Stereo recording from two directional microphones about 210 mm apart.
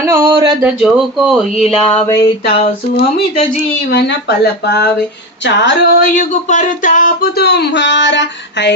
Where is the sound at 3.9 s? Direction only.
55° left (ahead or behind).